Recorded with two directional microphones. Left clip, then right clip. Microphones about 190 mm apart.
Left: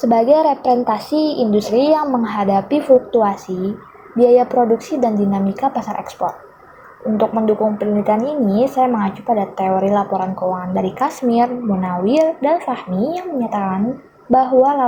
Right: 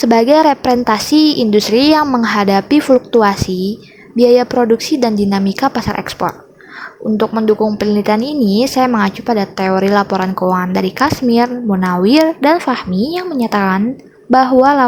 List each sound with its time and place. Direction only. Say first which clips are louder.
0.0 s a woman's voice: right 3 dB; 45° right (ahead or behind)
7.2 s a woman's voice: right 2 dB; 40° right (ahead or behind)